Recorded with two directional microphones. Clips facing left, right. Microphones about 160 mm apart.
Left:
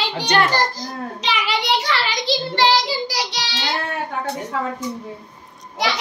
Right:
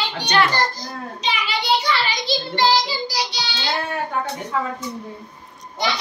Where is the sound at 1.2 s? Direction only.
80° left.